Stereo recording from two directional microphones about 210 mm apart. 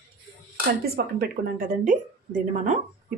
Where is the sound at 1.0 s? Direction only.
40° right (ahead or behind).